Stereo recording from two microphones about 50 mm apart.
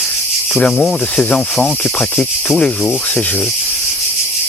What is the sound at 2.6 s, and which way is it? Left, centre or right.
Speech, left.